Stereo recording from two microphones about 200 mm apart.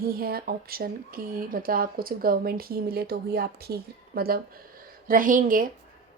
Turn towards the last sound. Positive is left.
turn(degrees=-45)  # may be behind; listen again after turning